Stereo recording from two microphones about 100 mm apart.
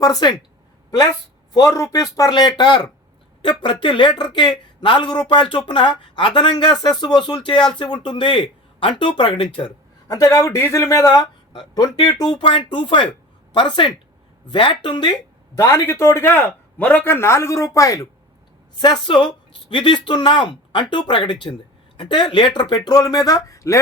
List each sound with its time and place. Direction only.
0.0 s speech: 40° left (ahead or behind)
1.5 s speech: 35° left (ahead or behind); by 9.7 s 60° left (ahead or behind)
10.1 s speech: 35° left (ahead or behind)
12.0 s speech: 50° left (ahead or behind)
15.5 s a man's voice: 30° left (ahead or behind)
18.8 s speech: 50° left (ahead or behind); by 23.8 s 30° left (ahead or behind)